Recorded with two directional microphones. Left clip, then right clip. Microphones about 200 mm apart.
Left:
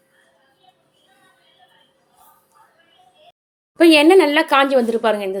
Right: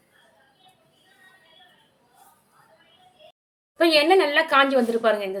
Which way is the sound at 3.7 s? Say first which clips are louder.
Left 7 dB; 40° left (ahead or behind).